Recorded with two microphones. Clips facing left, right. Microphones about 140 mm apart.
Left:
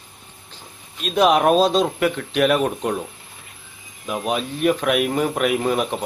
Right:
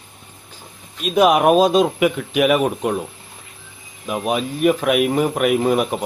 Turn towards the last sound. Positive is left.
turn(degrees=-5)  # may be behind; listen again after turning